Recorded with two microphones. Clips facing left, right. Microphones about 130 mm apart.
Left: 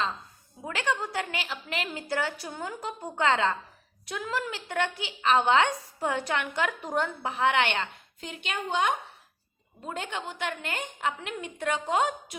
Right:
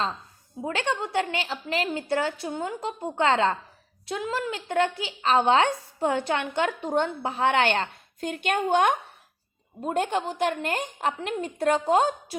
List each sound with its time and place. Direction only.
0.6 s a woman's voice: 30° right (ahead or behind)